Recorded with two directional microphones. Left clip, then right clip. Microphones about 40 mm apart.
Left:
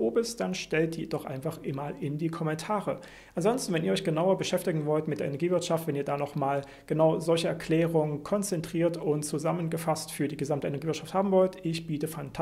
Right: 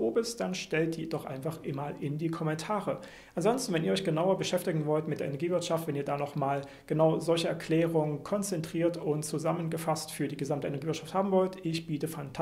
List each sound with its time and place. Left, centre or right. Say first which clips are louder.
0.1 s speech: left 2 dB; left